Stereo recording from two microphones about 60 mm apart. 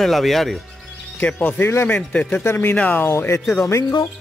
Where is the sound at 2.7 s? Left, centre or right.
Left.